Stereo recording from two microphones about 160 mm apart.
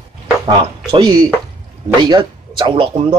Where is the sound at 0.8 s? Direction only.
25° right (ahead or behind).